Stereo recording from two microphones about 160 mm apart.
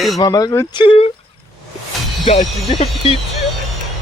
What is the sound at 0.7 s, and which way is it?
Speech, 35° left (ahead or behind).